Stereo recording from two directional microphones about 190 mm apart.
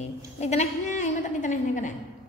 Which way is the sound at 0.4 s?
35° left (ahead or behind).